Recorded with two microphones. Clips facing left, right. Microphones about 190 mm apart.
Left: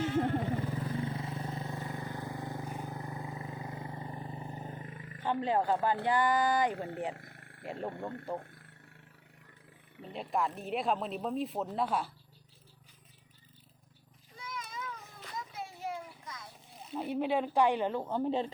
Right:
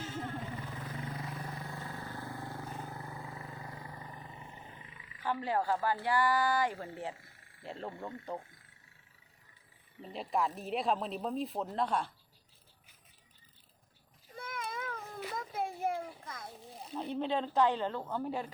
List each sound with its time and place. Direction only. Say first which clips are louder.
0.0 s vehicle: left 10 dB; 65° left (ahead or behind)
0.9 s vehicle: left 5 dB; 25° left (ahead or behind); by 5.2 s 45° left (ahead or behind)
5.2 s speech: left 3 dB; 20° left (ahead or behind)
6.7 s speech: left 5 dB; 65° left (ahead or behind)
7.1 s frog: left 4 dB; 65° left (ahead or behind)
7.6 s speech: left 4 dB; 15° left (ahead or behind)
8.4 s speech: left 4 dB; 60° left (ahead or behind)
10.0 s speech: even; centre (ahead or behind)
14.3 s a sound: right 3 dB; 55° right (ahead or behind)
16.9 s a woman's voice: left 3 dB; 10° left (ahead or behind)